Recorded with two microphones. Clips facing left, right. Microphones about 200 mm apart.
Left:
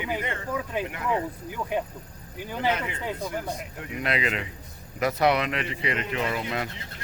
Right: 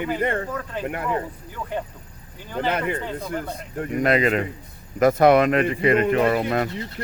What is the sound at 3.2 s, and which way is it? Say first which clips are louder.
Speech: right 2 dB; 10° left (ahead or behind).